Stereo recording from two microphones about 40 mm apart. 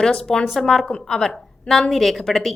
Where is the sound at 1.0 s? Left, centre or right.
Centre.